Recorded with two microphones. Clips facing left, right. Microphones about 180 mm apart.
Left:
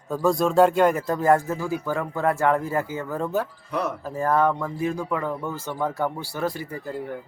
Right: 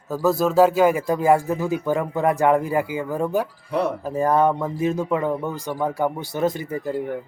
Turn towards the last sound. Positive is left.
turn(degrees=-20)  # may be behind; listen again after turning